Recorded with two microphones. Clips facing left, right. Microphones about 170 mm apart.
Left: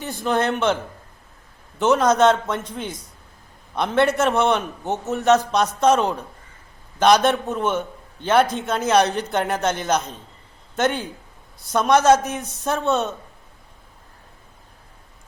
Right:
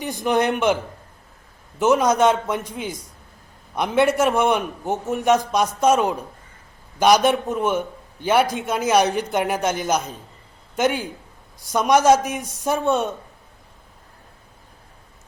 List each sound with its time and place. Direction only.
0.0 s a man's voice: 15° right (ahead or behind)
1.8 s a man's voice: 10° right (ahead or behind)